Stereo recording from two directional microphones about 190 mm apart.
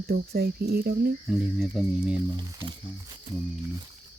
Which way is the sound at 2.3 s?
25° right (ahead or behind).